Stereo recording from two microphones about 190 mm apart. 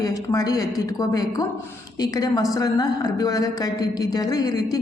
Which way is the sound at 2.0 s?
20° left (ahead or behind).